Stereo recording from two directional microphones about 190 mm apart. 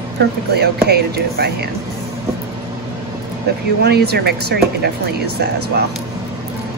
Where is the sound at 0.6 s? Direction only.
55° right (ahead or behind).